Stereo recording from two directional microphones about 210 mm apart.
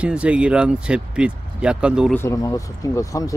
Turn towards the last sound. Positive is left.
turn(degrees=15)  # may be behind; listen again after turning